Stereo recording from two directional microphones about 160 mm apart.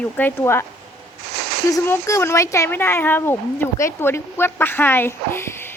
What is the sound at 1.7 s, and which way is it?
Speech, 15° left (ahead or behind).